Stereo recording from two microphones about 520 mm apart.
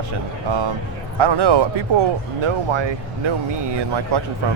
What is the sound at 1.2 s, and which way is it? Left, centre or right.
Speech, right.